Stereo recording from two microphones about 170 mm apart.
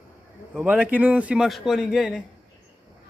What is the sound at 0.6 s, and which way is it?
A man's voice, 10° right (ahead or behind).